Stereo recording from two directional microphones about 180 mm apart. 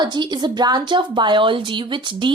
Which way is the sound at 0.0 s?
25° right (ahead or behind).